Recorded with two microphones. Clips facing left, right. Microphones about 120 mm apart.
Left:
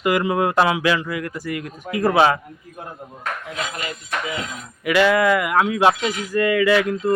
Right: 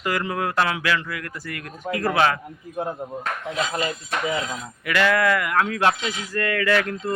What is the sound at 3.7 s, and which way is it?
Music, 35° right (ahead or behind).